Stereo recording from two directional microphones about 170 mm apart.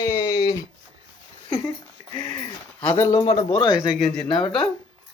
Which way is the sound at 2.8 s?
10° left (ahead or behind).